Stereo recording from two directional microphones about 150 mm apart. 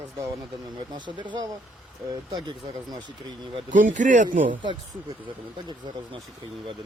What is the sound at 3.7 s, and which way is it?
Speech, 60° right (ahead or behind).